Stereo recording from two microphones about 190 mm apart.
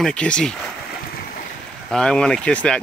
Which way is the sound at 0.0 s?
5° left (ahead or behind).